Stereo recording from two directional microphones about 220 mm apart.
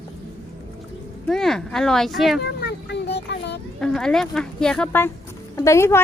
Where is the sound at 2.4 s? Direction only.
50° left (ahead or behind).